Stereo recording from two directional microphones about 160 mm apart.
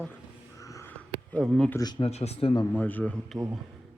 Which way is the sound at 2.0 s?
40° left (ahead or behind).